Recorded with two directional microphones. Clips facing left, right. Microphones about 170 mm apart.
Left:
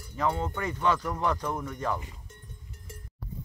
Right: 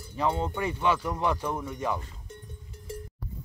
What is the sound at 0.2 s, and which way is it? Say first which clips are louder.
Speech: right 1 dB; 20° right (ahead or behind).